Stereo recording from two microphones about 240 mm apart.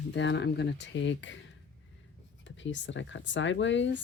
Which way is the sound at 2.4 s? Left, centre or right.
Left.